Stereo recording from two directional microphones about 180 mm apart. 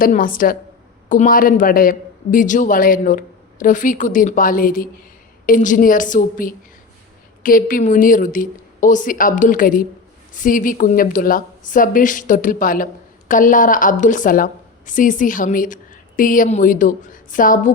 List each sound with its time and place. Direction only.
0.0 s a woman's voice: 50° left (ahead or behind)